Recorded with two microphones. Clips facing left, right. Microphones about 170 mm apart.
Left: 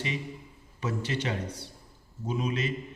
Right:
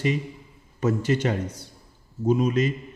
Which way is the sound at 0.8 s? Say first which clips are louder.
Right 9 dB; 45° right (ahead or behind).